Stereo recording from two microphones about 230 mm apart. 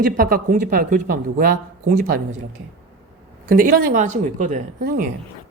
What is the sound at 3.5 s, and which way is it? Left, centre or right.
Speech, right.